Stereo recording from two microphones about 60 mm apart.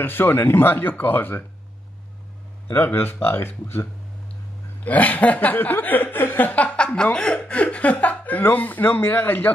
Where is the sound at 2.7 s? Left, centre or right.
Left.